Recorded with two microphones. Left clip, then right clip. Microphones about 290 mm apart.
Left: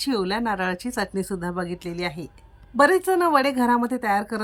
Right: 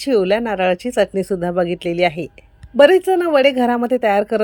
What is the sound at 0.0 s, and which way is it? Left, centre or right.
A woman's voice, centre.